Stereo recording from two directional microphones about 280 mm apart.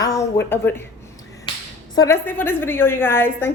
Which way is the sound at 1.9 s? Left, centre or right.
Centre.